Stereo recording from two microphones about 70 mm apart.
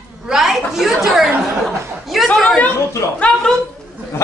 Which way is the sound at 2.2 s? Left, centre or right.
Centre.